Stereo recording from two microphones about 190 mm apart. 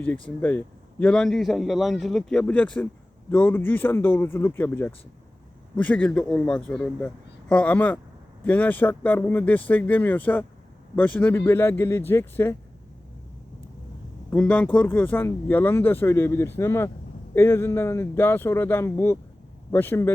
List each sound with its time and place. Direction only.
0.0 s a man's voice: 5° left (ahead or behind)
14.3 s speech: 5° left (ahead or behind)